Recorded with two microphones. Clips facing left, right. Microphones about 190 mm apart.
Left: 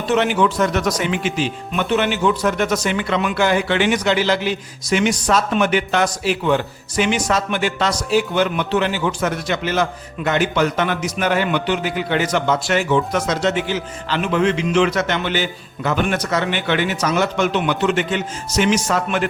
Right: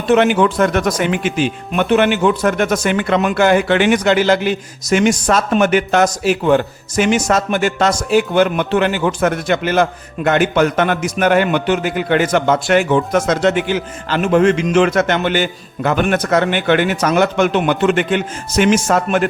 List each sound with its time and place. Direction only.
0.1 s speech: 55° right (ahead or behind)